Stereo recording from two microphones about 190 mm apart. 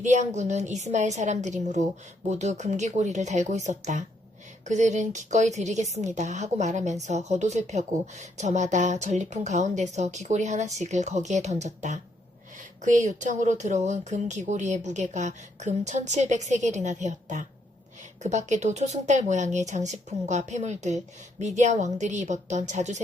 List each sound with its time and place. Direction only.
0.0 s a woman's voice: 40° right (ahead or behind)